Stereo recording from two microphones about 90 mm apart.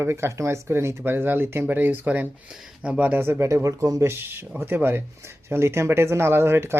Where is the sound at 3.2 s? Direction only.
30° right (ahead or behind).